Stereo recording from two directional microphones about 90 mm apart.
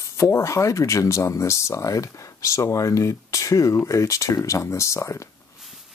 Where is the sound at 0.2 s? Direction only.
35° left (ahead or behind).